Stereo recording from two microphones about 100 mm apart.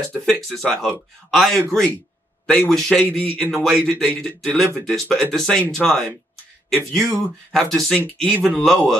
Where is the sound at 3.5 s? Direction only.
Centre (ahead or behind).